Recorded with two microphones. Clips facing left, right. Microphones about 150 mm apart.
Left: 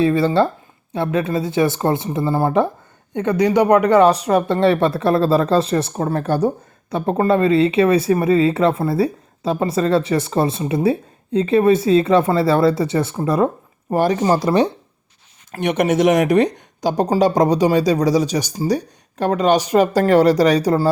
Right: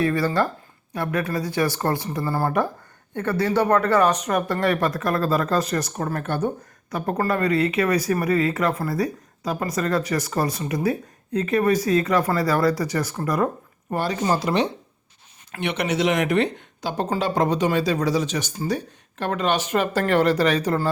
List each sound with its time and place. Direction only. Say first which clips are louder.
0.0 s speech: left 6 dB; 25° left (ahead or behind)
4.0 s speech: left 6 dB; 30° left (ahead or behind)
6.9 s speech: left 7 dB; 25° left (ahead or behind)
13.9 s speech: left 8 dB; 45° left (ahead or behind)
14.3 s speech: left 6 dB; 35° left (ahead or behind)